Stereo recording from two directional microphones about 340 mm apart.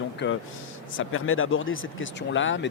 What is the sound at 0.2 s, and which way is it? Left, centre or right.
Speech, left.